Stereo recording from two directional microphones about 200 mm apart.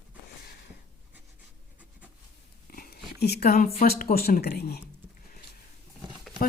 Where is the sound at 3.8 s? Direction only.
50° left (ahead or behind).